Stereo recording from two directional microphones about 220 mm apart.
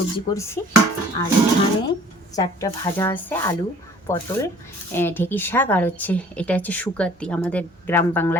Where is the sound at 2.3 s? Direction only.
15° left (ahead or behind).